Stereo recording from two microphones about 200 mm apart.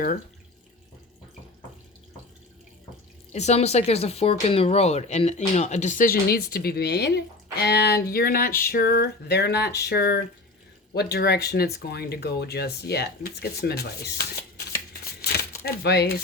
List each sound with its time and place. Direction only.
3.3 s speech: 35° left (ahead or behind); by 14.3 s 55° left (ahead or behind)
15.6 s speech: 55° left (ahead or behind)